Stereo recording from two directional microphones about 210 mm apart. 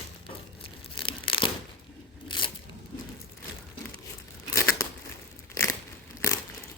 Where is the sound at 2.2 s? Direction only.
25° left (ahead or behind).